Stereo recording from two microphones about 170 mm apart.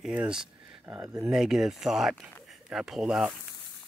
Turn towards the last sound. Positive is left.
turn(degrees=-5)  # may be behind; listen again after turning